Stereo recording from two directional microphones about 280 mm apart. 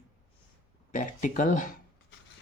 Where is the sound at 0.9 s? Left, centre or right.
Left.